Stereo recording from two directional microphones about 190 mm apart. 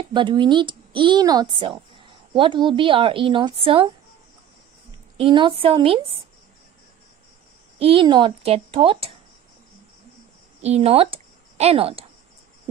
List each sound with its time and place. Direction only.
0.1 s speech: 25° right (ahead or behind)
5.1 s speech: 25° right (ahead or behind)
7.8 s speech: 30° right (ahead or behind)
10.6 s a woman's voice: 35° right (ahead or behind)